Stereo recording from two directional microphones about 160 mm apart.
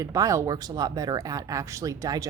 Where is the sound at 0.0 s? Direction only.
20° right (ahead or behind).